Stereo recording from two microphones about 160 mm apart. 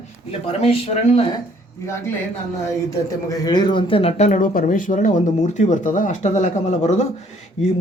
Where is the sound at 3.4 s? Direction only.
25° left (ahead or behind).